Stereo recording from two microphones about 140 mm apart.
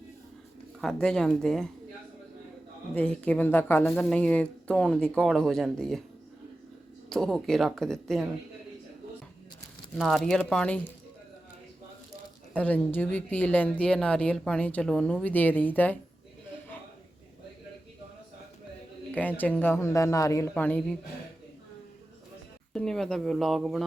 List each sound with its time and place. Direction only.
0.8 s speech: 5° left (ahead or behind)
2.9 s a woman's voice: 5° left (ahead or behind)
7.1 s speech: 5° left (ahead or behind)
10.0 s speech: centre (ahead or behind)
12.5 s a woman's voice: 10° left (ahead or behind)
19.4 s a man's voice: 15° left (ahead or behind)
20.5 s a woman's voice: 10° left (ahead or behind)
22.7 s speech: 5° left (ahead or behind)